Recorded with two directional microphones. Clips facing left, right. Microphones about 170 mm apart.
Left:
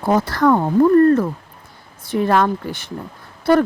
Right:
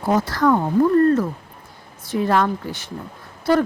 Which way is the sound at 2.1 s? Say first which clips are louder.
Left 2 dB; 60° left (ahead or behind).